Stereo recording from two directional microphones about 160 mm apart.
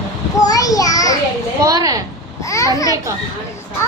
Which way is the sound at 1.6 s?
20° right (ahead or behind).